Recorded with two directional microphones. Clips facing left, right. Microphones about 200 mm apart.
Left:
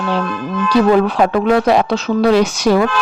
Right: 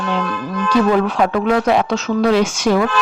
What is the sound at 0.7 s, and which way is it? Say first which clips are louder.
A woman's voice: left 3 dB; 35° left (ahead or behind).